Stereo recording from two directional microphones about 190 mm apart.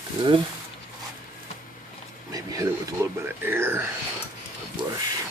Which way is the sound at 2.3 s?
15° right (ahead or behind).